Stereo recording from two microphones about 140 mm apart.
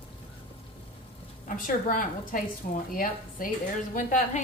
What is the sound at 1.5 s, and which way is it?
A woman's voice, 70° left (ahead or behind).